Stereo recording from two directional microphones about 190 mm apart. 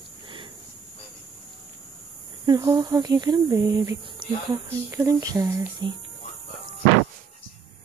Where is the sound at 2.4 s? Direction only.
20° right (ahead or behind).